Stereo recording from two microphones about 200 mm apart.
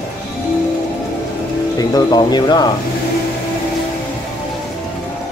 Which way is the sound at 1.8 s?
20° left (ahead or behind).